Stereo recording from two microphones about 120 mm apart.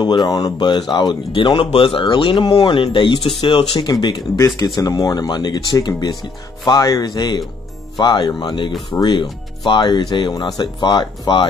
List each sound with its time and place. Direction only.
0.0 s speech: 35° left (ahead or behind)
4.7 s speech: 30° left (ahead or behind)